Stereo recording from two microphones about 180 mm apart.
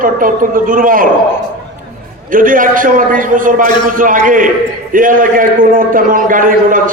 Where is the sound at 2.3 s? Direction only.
50° right (ahead or behind).